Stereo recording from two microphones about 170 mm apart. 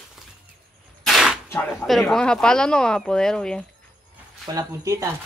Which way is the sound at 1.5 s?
10° left (ahead or behind).